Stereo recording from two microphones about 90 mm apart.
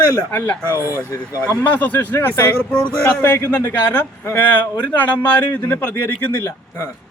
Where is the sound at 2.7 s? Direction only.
10° left (ahead or behind).